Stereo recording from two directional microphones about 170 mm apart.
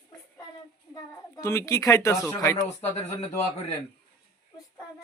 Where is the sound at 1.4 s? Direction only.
15° left (ahead or behind).